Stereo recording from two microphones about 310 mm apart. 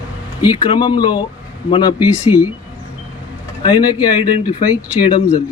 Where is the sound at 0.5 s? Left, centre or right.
Centre.